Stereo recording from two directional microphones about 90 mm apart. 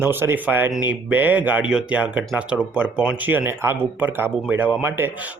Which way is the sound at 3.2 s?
25° right (ahead or behind).